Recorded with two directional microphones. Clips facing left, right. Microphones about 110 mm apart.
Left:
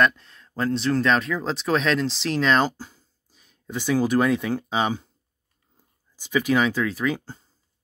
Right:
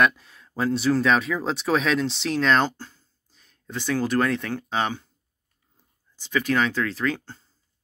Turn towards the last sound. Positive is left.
turn(degrees=10)  # may be behind; listen again after turning